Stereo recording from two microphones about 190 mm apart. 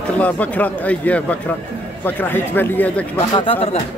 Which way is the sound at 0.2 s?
10° left (ahead or behind).